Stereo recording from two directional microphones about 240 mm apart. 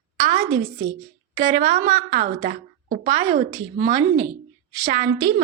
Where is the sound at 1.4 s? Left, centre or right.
Right.